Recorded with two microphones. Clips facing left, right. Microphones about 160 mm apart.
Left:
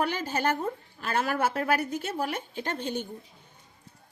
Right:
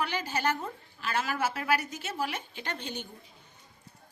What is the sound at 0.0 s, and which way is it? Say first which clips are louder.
Speech: left 3 dB; 50° left (ahead or behind).